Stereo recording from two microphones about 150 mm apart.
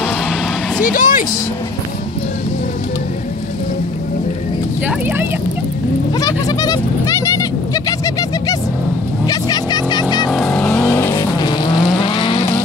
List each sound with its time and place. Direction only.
0.9 s vehicle: 65° left (ahead or behind)
4.8 s speech: 15° right (ahead or behind)
6.1 s a sound: 25° left (ahead or behind)
9.3 s vehicle: 25° left (ahead or behind)
10.3 s vehicle: 5° left (ahead or behind); by 12.4 s 30° left (ahead or behind)